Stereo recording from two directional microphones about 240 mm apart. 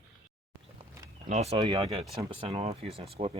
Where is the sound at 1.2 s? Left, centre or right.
Right.